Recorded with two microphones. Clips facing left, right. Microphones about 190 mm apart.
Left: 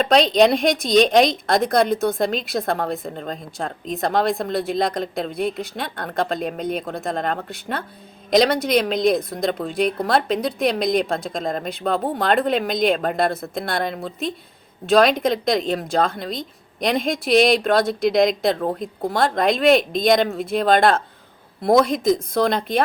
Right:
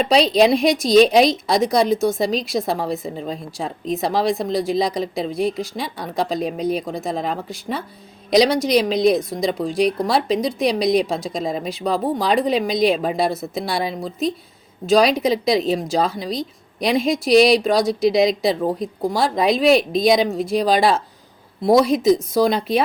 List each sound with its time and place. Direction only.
0.0 s speech: centre (ahead or behind)